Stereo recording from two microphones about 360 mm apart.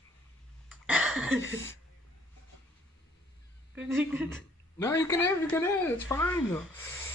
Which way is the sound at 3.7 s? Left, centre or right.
Centre.